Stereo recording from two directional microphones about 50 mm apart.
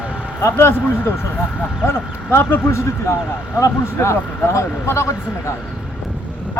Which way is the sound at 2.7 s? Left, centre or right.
Left.